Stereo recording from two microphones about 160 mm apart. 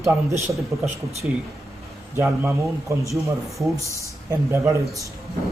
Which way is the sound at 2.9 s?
20° right (ahead or behind).